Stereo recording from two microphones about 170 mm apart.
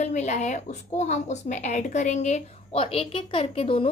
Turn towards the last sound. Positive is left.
turn(degrees=35)  # may be behind; listen again after turning